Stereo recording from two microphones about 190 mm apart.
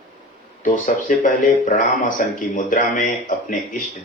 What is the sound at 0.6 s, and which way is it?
Speech, 45° left (ahead or behind).